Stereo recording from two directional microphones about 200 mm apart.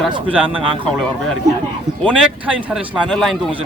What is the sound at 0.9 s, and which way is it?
Speech, centre (ahead or behind).